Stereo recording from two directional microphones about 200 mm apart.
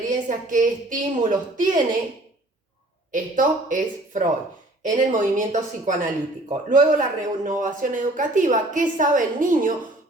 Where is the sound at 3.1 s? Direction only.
40° right (ahead or behind).